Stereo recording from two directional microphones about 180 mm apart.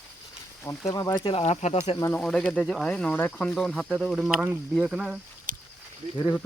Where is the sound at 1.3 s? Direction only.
35° left (ahead or behind).